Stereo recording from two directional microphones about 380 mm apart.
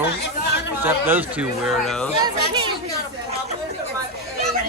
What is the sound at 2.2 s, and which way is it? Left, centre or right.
Chatter, centre.